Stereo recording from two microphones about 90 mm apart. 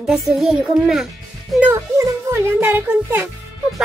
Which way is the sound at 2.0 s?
30° right (ahead or behind).